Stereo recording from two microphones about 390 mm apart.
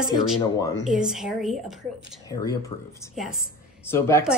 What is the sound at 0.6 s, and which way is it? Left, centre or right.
Speech, centre.